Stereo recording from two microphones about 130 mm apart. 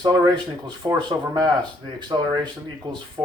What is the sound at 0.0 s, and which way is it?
Speech, 30° right (ahead or behind).